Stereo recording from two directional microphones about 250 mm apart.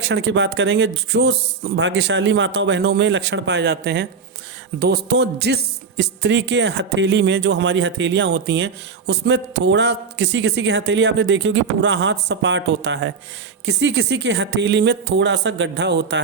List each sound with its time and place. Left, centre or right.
0.1 s speech: right
4.8 s a sound: right
6.0 s speech: right